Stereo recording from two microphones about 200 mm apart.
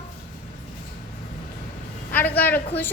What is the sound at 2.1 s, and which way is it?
Speech, 10° left (ahead or behind).